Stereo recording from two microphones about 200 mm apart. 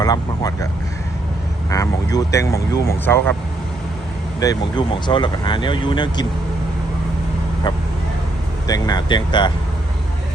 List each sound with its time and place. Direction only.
0.0 s speech: 20° left (ahead or behind)
1.7 s speech: 15° left (ahead or behind)
4.4 s speech: 20° left (ahead or behind)
8.6 s speech: 20° left (ahead or behind)